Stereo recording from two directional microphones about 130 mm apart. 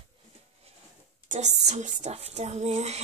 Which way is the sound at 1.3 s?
60° right (ahead or behind).